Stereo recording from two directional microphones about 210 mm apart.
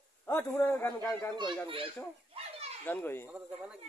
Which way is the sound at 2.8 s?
10° left (ahead or behind).